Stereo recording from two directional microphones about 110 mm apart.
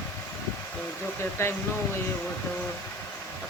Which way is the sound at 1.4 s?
25° left (ahead or behind).